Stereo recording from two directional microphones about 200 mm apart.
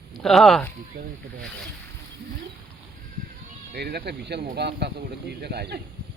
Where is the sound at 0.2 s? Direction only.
Centre (ahead or behind).